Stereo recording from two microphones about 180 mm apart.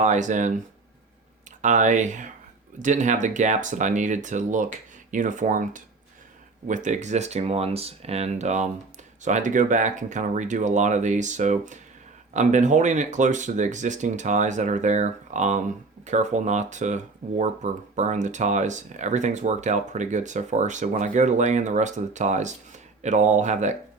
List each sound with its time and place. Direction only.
0.0 s speech: 40° right (ahead or behind)
1.6 s speech: 40° right (ahead or behind)